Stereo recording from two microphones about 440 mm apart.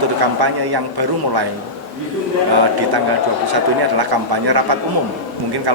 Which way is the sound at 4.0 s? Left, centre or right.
Right.